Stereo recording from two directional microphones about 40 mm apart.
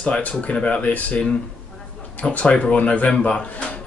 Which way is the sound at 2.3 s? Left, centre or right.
Left.